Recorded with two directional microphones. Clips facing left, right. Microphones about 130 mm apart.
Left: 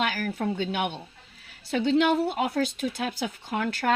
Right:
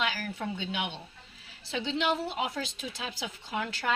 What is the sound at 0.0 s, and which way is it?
Speech, 50° left (ahead or behind).